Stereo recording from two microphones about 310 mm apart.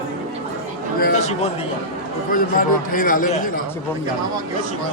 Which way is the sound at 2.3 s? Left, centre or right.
Left.